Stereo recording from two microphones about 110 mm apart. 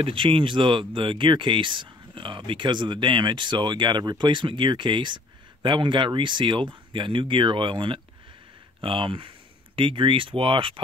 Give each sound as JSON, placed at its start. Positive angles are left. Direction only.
{"t": 0.0, "sound": "speech", "side_deg": -50}